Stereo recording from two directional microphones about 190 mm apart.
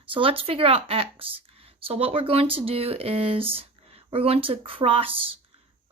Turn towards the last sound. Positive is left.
turn(degrees=-30)  # may be behind; listen again after turning